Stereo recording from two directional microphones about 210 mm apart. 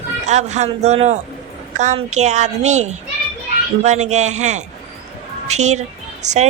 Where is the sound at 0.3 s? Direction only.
35° right (ahead or behind).